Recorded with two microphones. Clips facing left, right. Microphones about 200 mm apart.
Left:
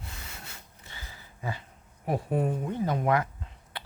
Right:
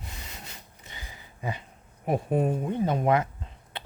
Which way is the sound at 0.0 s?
15° right (ahead or behind).